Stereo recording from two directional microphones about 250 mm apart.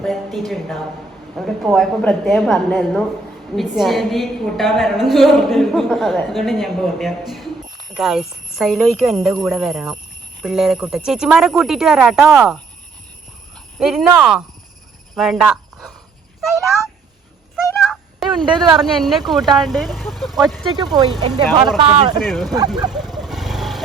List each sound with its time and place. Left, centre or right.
0.0 s a woman's voice: centre
13.7 s a woman's voice: centre
17.8 s a sound: centre
18.4 s speech: centre
18.8 s a woman's voice: centre
20.7 s speech: centre
22.2 s a woman's voice: centre
22.9 s vehicle: centre